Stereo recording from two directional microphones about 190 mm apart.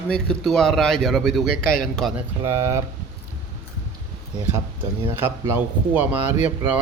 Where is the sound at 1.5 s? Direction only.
45° left (ahead or behind).